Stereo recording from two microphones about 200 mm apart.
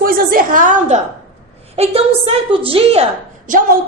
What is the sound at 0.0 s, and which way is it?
Speech, 45° right (ahead or behind).